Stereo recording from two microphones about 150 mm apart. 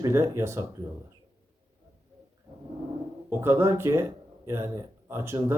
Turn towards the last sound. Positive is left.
turn(degrees=-15)  # may be behind; listen again after turning